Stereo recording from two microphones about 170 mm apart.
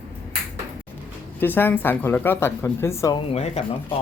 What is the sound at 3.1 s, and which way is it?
Speech, 35° left (ahead or behind).